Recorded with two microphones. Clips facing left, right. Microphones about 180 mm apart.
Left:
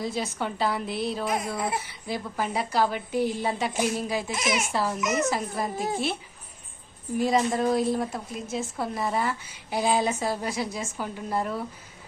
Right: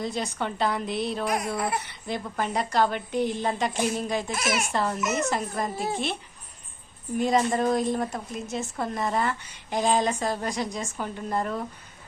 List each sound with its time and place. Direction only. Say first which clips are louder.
0.0 s a woman's voice: even; 5° left (ahead or behind)
4.4 s speech: even; 20° left (ahead or behind)
4.7 s a woman's voice: even; 5° left (ahead or behind)
7.2 s a woman's voice: even; centre (ahead or behind)